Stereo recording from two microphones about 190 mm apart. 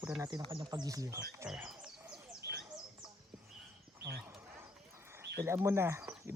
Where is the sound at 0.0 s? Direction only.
10° right (ahead or behind).